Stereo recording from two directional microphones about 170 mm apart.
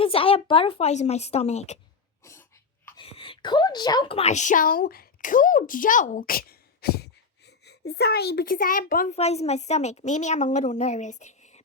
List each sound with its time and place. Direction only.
0.0 s speech: 35° left (ahead or behind)
3.0 s a woman's voice: 30° left (ahead or behind); by 9.1 s 55° left (ahead or behind)
9.1 s a woman's voice: 40° left (ahead or behind)